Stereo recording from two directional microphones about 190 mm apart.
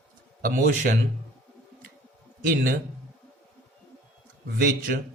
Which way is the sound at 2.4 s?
50° right (ahead or behind).